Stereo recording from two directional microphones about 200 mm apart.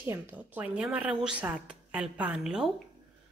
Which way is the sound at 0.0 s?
10° right (ahead or behind).